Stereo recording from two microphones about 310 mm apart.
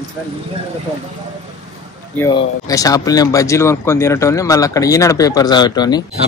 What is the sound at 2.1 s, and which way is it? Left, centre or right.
Speech, centre.